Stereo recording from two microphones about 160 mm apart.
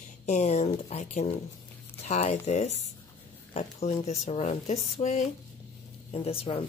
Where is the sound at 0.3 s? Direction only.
45° left (ahead or behind).